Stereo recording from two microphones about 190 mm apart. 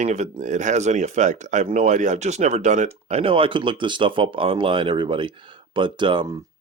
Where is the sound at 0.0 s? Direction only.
40° right (ahead or behind).